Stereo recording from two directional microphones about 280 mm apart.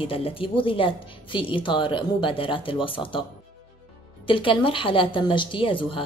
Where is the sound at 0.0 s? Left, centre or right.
Centre.